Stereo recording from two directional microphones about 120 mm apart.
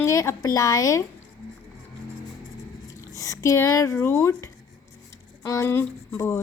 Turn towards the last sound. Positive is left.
turn(degrees=25)  # may be behind; listen again after turning